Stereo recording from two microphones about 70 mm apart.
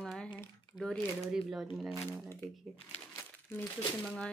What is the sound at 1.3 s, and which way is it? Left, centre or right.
Speech, centre.